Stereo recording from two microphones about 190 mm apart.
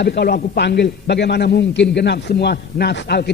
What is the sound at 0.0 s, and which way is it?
A man's voice, 55° left (ahead or behind).